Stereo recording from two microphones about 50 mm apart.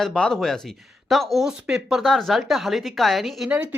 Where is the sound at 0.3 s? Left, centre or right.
Centre.